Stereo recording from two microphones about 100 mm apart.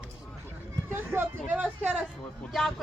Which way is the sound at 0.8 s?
20° right (ahead or behind).